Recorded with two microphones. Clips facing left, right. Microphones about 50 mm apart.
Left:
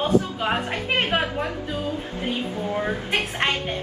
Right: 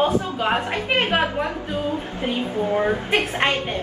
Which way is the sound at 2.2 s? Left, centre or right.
Right.